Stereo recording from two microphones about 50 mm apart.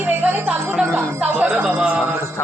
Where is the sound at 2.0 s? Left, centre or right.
Right.